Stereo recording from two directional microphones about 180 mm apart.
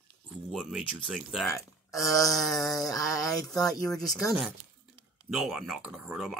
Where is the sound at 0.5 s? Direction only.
Centre (ahead or behind).